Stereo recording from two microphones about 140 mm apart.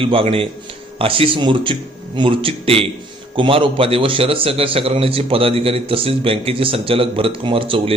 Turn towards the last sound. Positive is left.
turn(degrees=-40)  # may be behind; listen again after turning